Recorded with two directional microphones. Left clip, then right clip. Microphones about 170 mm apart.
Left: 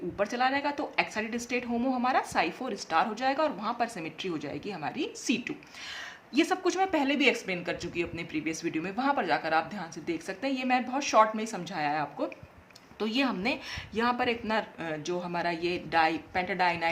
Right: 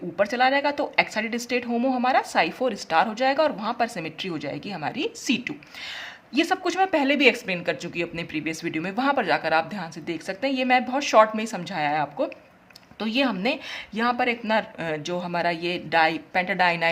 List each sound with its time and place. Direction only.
0.2 s speech: 35° right (ahead or behind)
6.3 s speech: 25° right (ahead or behind)